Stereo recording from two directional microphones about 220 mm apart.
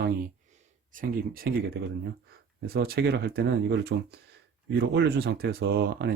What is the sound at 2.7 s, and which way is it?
Speech, 45° right (ahead or behind).